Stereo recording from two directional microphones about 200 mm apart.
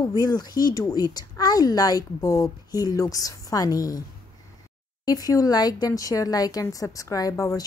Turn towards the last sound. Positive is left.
turn(degrees=15)  # may be behind; listen again after turning